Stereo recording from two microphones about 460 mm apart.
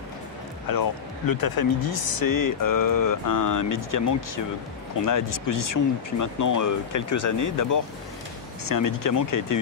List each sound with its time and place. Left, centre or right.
0.7 s speech: left
5.0 s speech: left